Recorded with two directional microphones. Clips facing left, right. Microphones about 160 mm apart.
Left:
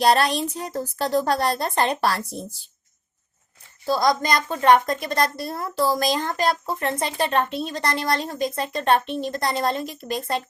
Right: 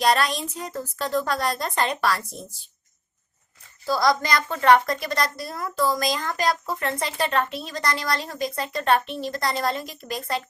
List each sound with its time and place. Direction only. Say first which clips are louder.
0.0 s a woman's voice: left 3 dB; 30° left (ahead or behind)
3.8 s a woman's voice: left 1 dB; 25° left (ahead or behind)